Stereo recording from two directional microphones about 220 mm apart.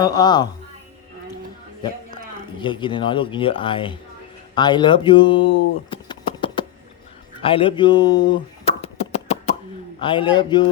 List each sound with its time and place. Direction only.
0.0 s speech: 20° left (ahead or behind)
2.6 s speech: 20° left (ahead or behind)
8.8 s beatboxing: 30° left (ahead or behind)
10.0 s speech: 20° left (ahead or behind)